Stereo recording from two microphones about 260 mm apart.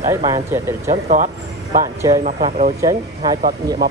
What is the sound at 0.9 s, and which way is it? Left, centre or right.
Speech, right.